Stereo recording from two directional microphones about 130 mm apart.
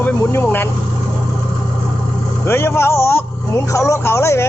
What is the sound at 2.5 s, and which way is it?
Speech, 20° left (ahead or behind).